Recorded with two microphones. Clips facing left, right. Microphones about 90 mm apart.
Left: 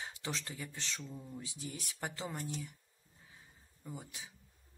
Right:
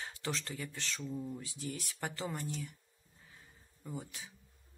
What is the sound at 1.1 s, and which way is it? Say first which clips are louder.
Speech: right 6 dB; 5° right (ahead or behind).